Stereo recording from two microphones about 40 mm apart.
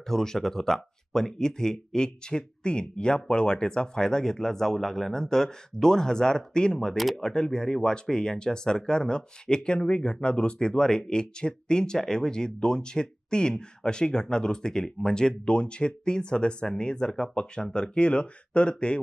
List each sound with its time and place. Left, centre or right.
0.1 s speech: centre
10.7 s speech: centre